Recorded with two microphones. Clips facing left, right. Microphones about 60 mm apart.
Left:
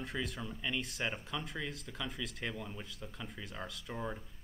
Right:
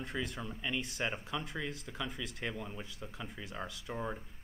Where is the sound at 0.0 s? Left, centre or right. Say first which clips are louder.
Right 1 dB; centre.